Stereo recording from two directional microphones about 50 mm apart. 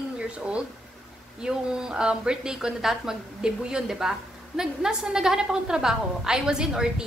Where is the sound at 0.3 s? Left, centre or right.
Right.